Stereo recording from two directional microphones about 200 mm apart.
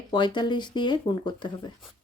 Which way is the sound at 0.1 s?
20° left (ahead or behind).